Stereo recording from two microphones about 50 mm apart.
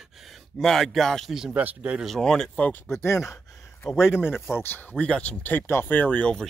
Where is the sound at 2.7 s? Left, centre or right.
Left.